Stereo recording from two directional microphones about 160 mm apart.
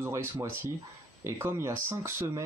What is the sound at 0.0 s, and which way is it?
Speech, 15° right (ahead or behind).